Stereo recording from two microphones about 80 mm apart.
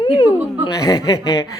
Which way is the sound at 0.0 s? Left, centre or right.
Left.